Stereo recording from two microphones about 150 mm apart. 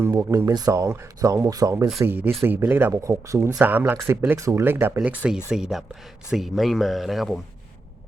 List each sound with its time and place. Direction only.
0.0 s speech: 15° right (ahead or behind); by 7.4 s centre (ahead or behind)